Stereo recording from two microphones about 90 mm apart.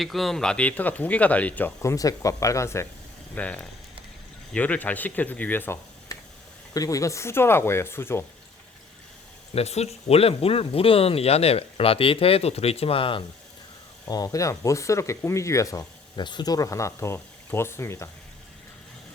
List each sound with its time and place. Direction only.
0.0 s speech: centre (ahead or behind); by 1.7 s 15° left (ahead or behind)
1.8 s speech: 35° left (ahead or behind)
3.3 s speech: 15° left (ahead or behind)
6.1 s a sound: 40° left (ahead or behind)
6.7 s speech: 40° left (ahead or behind)
10.2 s speech: 90° left
14.1 s speech: 40° left (ahead or behind)
16.1 s speech: 55° left (ahead or behind); by 18.1 s 30° left (ahead or behind)